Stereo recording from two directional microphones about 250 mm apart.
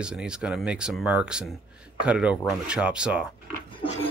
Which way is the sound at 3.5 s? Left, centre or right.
Centre.